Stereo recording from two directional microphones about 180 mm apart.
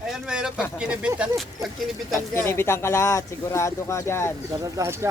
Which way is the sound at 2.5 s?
15° left (ahead or behind).